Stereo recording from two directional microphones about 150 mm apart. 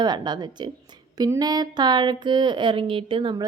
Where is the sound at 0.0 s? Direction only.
30° right (ahead or behind).